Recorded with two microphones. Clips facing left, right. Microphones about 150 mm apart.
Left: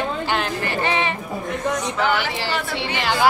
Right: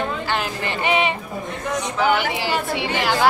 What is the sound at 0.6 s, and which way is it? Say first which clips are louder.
Speech: right 1 dB; 15° right (ahead or behind).